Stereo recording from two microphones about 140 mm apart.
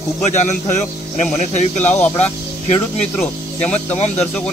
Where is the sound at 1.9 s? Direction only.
10° left (ahead or behind).